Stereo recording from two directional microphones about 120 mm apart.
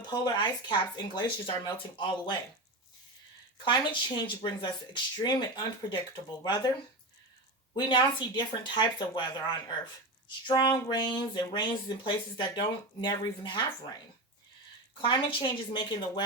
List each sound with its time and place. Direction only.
0.1 s speech: 40° left (ahead or behind)
3.6 s speech: 40° left (ahead or behind)
7.7 s speech: 40° left (ahead or behind)
15.0 s speech: 40° left (ahead or behind)